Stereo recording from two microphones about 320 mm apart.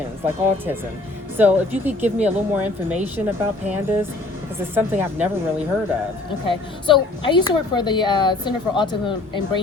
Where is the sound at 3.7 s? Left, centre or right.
Centre.